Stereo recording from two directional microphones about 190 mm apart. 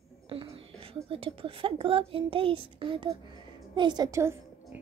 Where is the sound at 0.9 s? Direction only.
30° right (ahead or behind).